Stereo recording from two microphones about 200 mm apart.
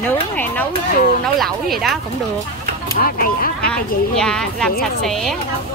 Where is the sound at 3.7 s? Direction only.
5° left (ahead or behind).